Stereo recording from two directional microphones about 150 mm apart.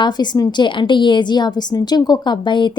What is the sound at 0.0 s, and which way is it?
A woman's voice, 30° left (ahead or behind).